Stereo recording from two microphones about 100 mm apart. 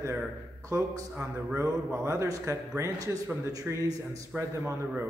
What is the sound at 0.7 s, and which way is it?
Speech, 35° right (ahead or behind).